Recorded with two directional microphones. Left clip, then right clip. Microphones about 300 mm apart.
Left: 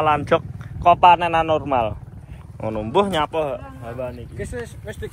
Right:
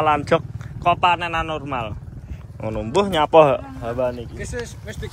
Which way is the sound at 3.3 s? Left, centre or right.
Right.